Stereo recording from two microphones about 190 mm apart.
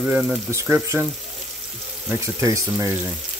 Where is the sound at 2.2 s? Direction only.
15° right (ahead or behind).